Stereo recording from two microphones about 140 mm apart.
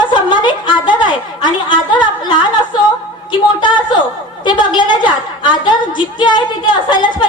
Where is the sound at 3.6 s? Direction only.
35° left (ahead or behind).